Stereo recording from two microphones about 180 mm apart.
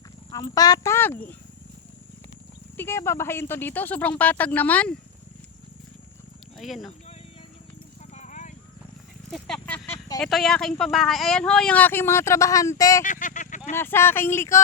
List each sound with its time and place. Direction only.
0.3 s speech: 20° left (ahead or behind)
2.7 s speech: 15° left (ahead or behind)
6.6 s speech: centre (ahead or behind)
8.1 s horse: 40° left (ahead or behind)
9.3 s a sound: 5° left (ahead or behind)
10.2 s speech: centre (ahead or behind); by 13.0 s 20° left (ahead or behind)
13.0 s speech: 45° left (ahead or behind)
13.7 s speech: 15° left (ahead or behind)